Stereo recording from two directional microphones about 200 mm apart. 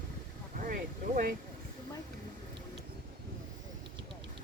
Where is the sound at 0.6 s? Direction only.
45° right (ahead or behind).